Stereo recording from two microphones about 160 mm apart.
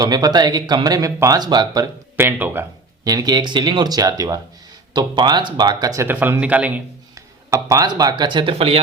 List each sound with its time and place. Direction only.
0.0 s speech: 25° right (ahead or behind); by 6.8 s 10° right (ahead or behind)
7.5 s speech: 20° right (ahead or behind)